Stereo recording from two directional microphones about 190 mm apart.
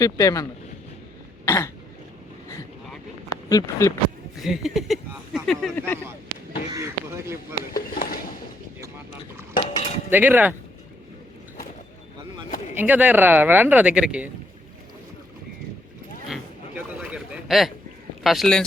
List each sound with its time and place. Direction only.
0.0 s speech: 20° left (ahead or behind)
1.5 s throat clearing: 15° left (ahead or behind)
3.5 s speech: 15° left (ahead or behind)
4.4 s speech: centre (ahead or behind)
6.7 s speech: 15° right (ahead or behind)
7.7 s speech: 50° left (ahead or behind)
9.6 s cutlery: 30° left (ahead or behind)
10.1 s speech: 10° right (ahead or behind)
12.7 s speech: 10° right (ahead or behind)
16.3 s a sound: 5° right (ahead or behind)
18.2 s speech: centre (ahead or behind)